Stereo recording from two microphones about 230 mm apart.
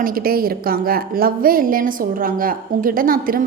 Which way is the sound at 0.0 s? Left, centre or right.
Right.